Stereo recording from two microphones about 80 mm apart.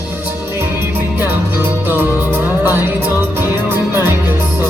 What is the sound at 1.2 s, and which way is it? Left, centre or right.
Music, right.